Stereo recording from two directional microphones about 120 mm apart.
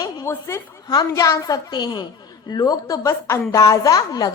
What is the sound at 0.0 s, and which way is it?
Snicker, 30° left (ahead or behind).